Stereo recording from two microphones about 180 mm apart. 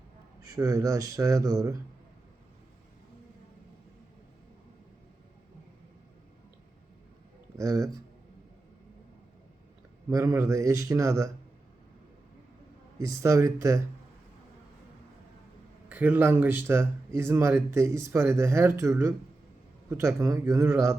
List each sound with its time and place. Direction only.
0.4 s speech: 20° right (ahead or behind)
7.5 s speech: 20° right (ahead or behind)
10.1 s speech: 15° right (ahead or behind)
13.2 s speech: 15° right (ahead or behind)
15.9 s speech: 10° right (ahead or behind)